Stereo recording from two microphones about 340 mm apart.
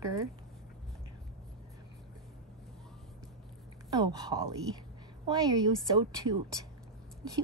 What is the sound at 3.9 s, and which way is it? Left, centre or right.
A woman's voice, centre.